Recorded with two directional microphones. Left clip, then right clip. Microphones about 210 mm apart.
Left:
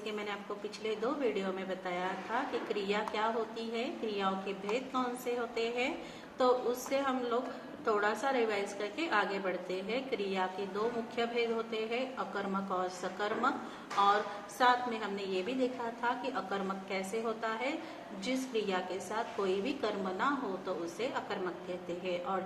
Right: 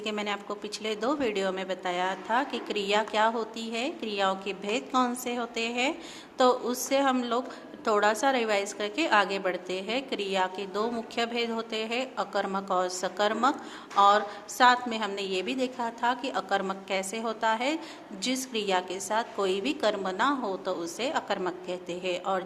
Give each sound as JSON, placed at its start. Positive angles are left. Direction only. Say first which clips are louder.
{"t": 0.0, "sound": "a woman's voice", "louder": "right 7 dB", "side_deg": -55}